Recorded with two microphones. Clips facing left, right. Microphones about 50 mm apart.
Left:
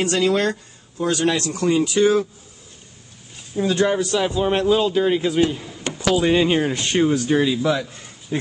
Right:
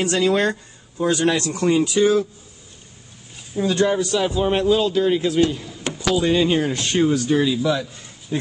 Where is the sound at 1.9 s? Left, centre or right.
Left.